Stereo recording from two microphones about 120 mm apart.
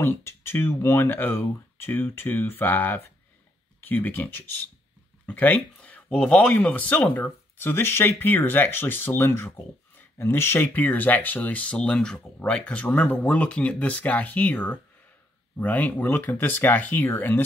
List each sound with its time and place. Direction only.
0.0 s speech: 20° left (ahead or behind)